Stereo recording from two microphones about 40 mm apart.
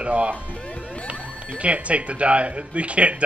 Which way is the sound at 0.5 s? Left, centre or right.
Left.